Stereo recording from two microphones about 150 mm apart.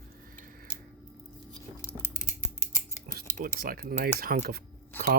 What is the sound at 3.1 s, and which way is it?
Speech, 70° right (ahead or behind).